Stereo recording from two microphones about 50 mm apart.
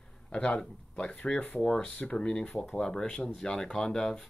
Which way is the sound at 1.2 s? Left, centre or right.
Left.